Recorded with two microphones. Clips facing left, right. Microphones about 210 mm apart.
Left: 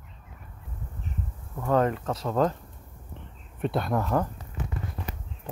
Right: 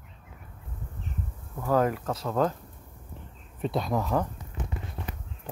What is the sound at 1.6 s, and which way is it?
Speech, 5° right (ahead or behind).